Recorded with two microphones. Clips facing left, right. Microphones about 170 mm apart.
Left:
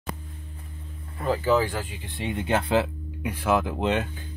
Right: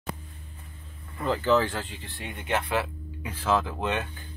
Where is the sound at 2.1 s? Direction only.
25° left (ahead or behind).